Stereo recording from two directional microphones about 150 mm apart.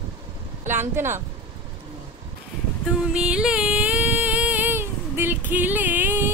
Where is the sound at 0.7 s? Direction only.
15° right (ahead or behind).